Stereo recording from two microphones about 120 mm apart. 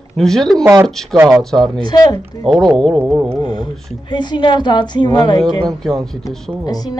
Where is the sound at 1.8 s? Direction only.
35° left (ahead or behind).